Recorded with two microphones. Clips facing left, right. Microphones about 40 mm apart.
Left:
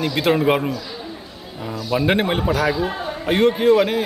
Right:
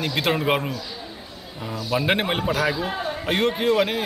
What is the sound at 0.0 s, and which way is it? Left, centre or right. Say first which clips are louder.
A man's voice: left 5 dB; centre.